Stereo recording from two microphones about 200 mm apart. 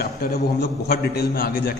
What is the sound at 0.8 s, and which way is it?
Speech, 50° left (ahead or behind).